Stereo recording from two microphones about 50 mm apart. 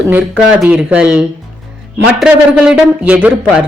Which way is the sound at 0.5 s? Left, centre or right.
Centre.